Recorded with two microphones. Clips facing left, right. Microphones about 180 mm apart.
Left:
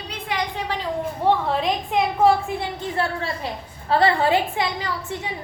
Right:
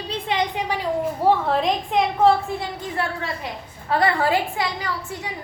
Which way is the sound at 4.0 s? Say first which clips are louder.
Left 1 dB; 25° left (ahead or behind).